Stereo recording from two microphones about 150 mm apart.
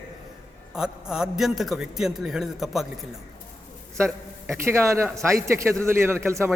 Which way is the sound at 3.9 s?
20° right (ahead or behind).